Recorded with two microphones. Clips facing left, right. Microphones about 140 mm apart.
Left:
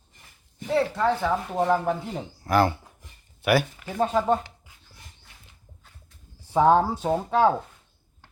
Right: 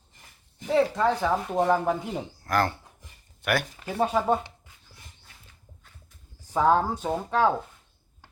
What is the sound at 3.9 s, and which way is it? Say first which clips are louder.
Speech: left 1 dB; 10° right (ahead or behind).